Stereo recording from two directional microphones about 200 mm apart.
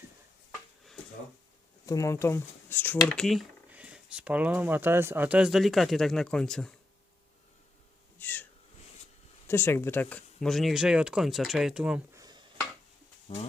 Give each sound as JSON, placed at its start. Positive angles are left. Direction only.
{"t": 1.9, "sound": "speech", "side_deg": 15}
{"t": 8.2, "sound": "wheeze", "side_deg": 10}
{"t": 9.5, "sound": "speech", "side_deg": 10}
{"t": 13.2, "sound": "speech", "side_deg": 30}